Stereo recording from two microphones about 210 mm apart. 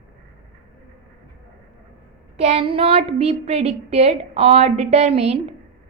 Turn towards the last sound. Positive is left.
turn(degrees=-30)  # may be behind; listen again after turning